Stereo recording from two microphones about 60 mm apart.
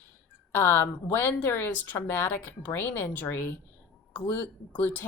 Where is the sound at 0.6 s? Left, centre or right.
Left.